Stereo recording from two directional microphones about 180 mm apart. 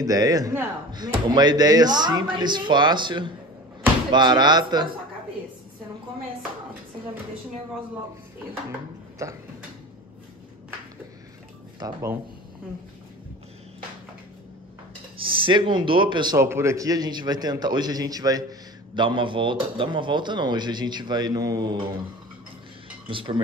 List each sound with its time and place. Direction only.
0.0 s a man's voice: 20° right (ahead or behind)
9.2 s speech: 15° right (ahead or behind)
11.8 s speech: 15° right (ahead or behind)
15.1 s a man's voice: 30° right (ahead or behind)
23.0 s a man's voice: 30° right (ahead or behind)